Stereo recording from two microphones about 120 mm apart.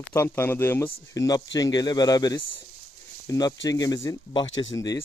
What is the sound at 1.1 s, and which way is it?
Speech, 30° left (ahead or behind).